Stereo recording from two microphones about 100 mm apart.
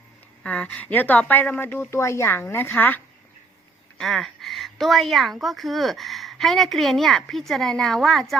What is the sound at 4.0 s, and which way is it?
A woman's voice, 5° left (ahead or behind).